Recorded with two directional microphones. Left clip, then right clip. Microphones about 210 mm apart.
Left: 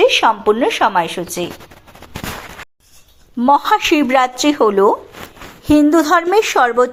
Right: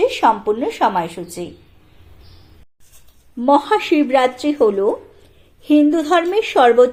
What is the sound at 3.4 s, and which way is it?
A woman's voice, 15° left (ahead or behind).